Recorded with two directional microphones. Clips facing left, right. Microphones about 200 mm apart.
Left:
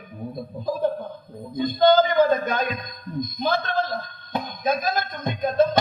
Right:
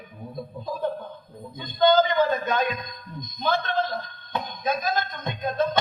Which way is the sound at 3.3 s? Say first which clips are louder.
Even; 40° left (ahead or behind).